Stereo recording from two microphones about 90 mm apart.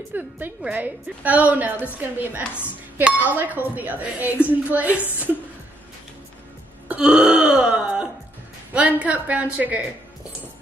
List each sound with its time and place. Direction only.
0.1 s a woman's voice: 20° right (ahead or behind)
7.0 s throat clearing: 10° right (ahead or behind)
8.7 s a woman's voice: 15° right (ahead or behind)